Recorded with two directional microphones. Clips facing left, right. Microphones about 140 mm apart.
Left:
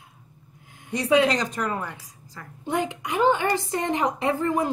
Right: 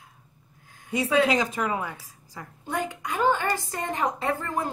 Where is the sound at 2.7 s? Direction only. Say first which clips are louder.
Left 4 dB; 20° left (ahead or behind).